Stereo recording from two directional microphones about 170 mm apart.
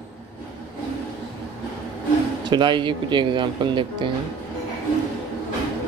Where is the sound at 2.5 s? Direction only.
30° right (ahead or behind).